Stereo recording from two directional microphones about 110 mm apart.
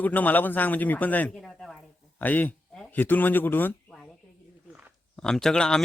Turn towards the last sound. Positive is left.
turn(degrees=5)  # may be behind; listen again after turning